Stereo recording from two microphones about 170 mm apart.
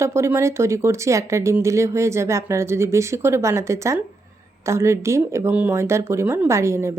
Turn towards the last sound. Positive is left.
turn(degrees=-15)  # may be behind; listen again after turning